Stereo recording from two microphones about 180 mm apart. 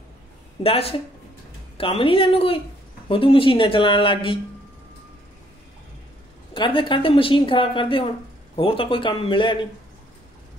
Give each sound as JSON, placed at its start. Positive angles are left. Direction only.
{"t": 0.7, "sound": "a woman's voice", "side_deg": 35}
{"t": 6.5, "sound": "a woman's voice", "side_deg": 30}